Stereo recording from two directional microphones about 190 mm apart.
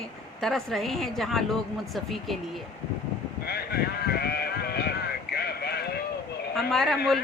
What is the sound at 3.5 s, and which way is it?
Sheep, 55° left (ahead or behind).